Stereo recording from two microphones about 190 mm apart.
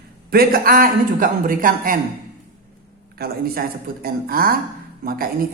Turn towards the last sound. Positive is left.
turn(degrees=-50)  # may be behind; listen again after turning